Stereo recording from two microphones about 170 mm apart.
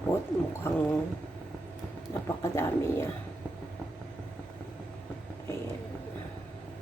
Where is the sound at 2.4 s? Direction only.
15° left (ahead or behind).